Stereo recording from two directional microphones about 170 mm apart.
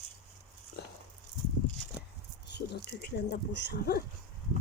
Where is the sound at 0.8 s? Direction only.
70° left (ahead or behind).